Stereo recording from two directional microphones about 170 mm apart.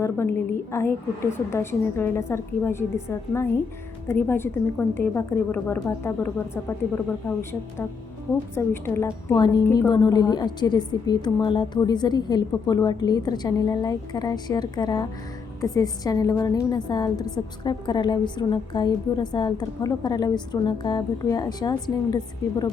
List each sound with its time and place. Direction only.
0.0 s a woman's voice: 15° left (ahead or behind)
8.5 s a woman's voice: 15° left (ahead or behind)